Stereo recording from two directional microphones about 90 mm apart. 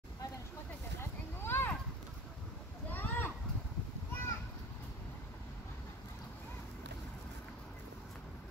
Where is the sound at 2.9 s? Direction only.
20° left (ahead or behind).